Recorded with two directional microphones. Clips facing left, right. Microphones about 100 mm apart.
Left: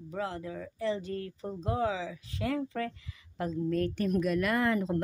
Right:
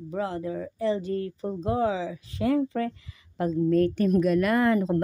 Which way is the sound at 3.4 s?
40° right (ahead or behind).